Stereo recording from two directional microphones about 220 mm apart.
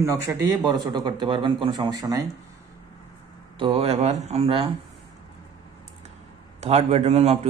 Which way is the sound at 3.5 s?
25° right (ahead or behind).